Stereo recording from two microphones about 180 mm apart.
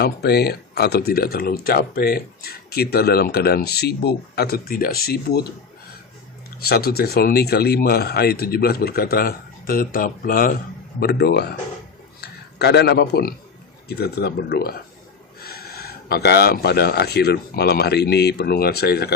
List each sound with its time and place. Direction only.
0.0 s speech: 60° left (ahead or behind)
6.6 s speech: 60° left (ahead or behind)